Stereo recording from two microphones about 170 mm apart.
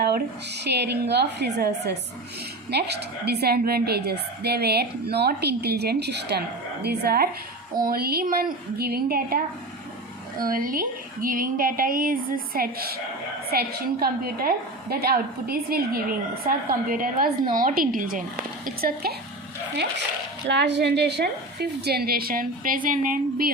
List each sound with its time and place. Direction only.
0.6 s a woman's voice: 75° right (ahead or behind)
6.8 s a woman's voice: 65° right (ahead or behind)
10.4 s a woman's voice: 55° right (ahead or behind)
20.5 s a woman's voice: 90° right; by 23.5 s 50° right (ahead or behind)